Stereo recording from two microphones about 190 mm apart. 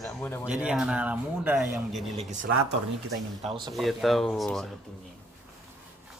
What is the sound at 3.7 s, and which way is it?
Speech, centre (ahead or behind).